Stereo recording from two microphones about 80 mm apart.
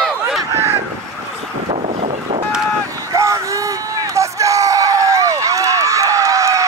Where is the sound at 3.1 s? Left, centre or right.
Right.